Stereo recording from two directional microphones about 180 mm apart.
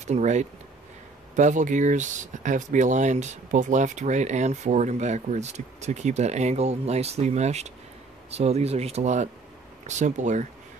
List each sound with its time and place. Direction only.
0.0 s speech: 40° right (ahead or behind)